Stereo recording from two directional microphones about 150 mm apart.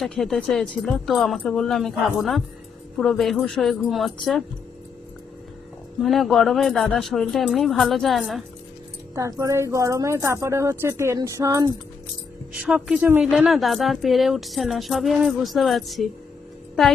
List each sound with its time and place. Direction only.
0.0 s a woman's voice: centre (ahead or behind)
6.0 s a woman's voice: centre (ahead or behind)
9.1 s a woman's voice: 20° right (ahead or behind)
12.6 s a woman's voice: 5° right (ahead or behind)